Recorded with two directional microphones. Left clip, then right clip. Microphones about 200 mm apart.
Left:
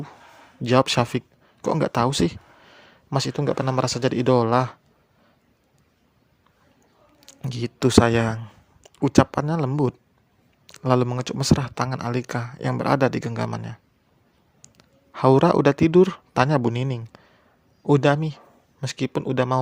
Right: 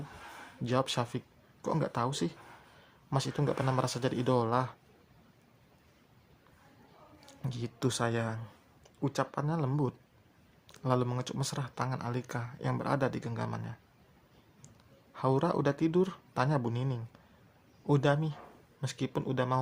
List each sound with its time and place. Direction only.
0.6 s speech: 40° left (ahead or behind)
7.3 s speech: 40° left (ahead or behind)
15.1 s speech: 40° left (ahead or behind)